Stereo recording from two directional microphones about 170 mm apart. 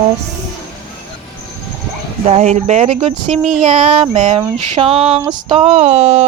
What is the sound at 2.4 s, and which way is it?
A woman's voice, 45° right (ahead or behind).